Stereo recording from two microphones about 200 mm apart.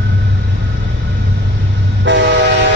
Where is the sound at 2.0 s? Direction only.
60° right (ahead or behind).